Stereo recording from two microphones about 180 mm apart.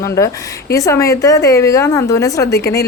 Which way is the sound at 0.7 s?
15° left (ahead or behind).